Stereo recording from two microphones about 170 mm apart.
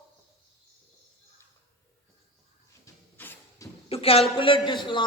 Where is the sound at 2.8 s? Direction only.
15° left (ahead or behind).